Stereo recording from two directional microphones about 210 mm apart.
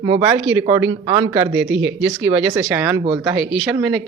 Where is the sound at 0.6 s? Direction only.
15° right (ahead or behind).